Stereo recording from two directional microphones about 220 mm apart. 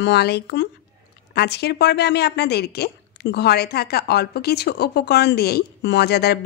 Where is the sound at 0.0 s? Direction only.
50° left (ahead or behind).